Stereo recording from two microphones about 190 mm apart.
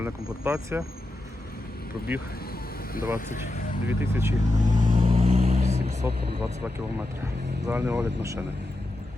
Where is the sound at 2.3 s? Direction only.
50° left (ahead or behind).